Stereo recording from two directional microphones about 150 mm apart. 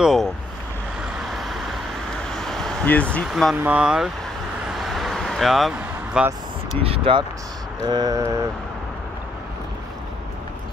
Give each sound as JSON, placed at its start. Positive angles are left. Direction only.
{"t": 0.0, "sound": "speech", "side_deg": 0}
{"t": 1.3, "sound": "vehicle", "side_deg": 0}
{"t": 3.3, "sound": "speech", "side_deg": 0}
{"t": 4.6, "sound": "vehicle", "side_deg": 0}
{"t": 6.8, "sound": "speech", "side_deg": -40}
{"t": 7.8, "sound": "a sound", "side_deg": -25}